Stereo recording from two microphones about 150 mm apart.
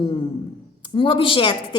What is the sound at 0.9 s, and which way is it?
Speech, 35° left (ahead or behind).